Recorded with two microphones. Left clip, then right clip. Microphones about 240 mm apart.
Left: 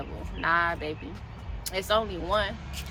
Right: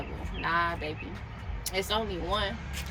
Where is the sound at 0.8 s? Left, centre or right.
Centre.